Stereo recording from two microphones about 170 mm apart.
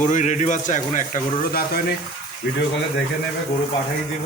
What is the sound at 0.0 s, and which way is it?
A man's voice, 45° left (ahead or behind).